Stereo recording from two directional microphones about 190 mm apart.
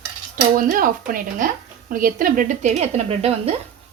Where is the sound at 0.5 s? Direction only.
45° right (ahead or behind).